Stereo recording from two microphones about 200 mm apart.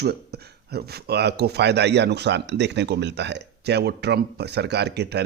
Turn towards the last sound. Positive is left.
turn(degrees=-55)  # may be behind; listen again after turning